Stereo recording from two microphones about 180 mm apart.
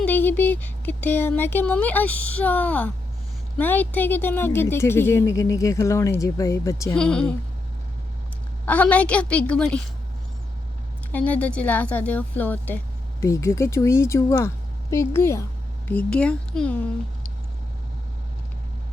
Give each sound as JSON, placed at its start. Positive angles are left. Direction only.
{"t": 0.0, "sound": "speech", "side_deg": 10}
{"t": 6.9, "sound": "speech", "side_deg": 5}
{"t": 8.6, "sound": "speech", "side_deg": 10}
{"t": 11.1, "sound": "speech", "side_deg": 10}